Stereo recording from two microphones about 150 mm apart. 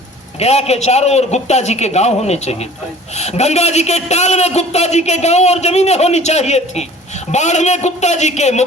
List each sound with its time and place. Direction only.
0.3 s a man's voice: 45° left (ahead or behind)